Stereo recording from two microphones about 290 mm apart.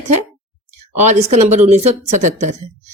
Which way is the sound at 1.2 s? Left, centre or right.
Right.